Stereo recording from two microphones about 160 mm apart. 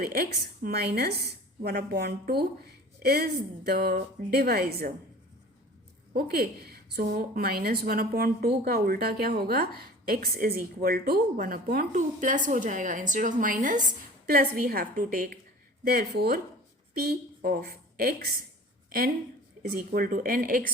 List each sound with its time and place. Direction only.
0.0 s a woman's voice: 70° right (ahead or behind)
6.1 s a woman's voice: 75° right (ahead or behind); by 13.8 s 55° right (ahead or behind)
14.3 s a woman's voice: 70° right (ahead or behind)
15.9 s a woman's voice: 75° right (ahead or behind)
19.7 s a woman's voice: 65° right (ahead or behind)